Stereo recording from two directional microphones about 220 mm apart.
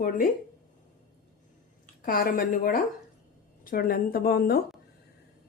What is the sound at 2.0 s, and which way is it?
A woman's voice, 40° left (ahead or behind).